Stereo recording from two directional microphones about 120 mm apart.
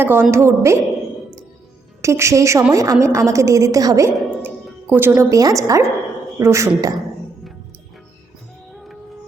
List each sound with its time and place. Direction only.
0.0 s a woman's voice: 15° right (ahead or behind)
2.0 s a woman's voice: 25° right (ahead or behind)
8.7 s music: centre (ahead or behind)